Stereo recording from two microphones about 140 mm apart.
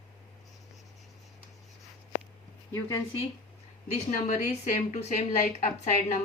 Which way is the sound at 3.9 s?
55° left (ahead or behind).